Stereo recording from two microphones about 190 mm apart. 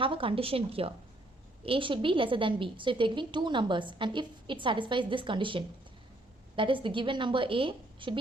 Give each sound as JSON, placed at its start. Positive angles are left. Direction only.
{"t": 0.0, "sound": "a woman's voice", "side_deg": -30}